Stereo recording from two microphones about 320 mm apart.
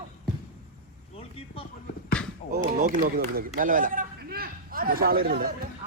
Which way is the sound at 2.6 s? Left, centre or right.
Right.